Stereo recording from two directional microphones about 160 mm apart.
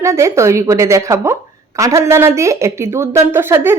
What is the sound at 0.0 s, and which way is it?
A woman's voice, 20° right (ahead or behind).